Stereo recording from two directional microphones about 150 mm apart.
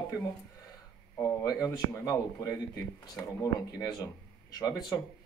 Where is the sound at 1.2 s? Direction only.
25° left (ahead or behind).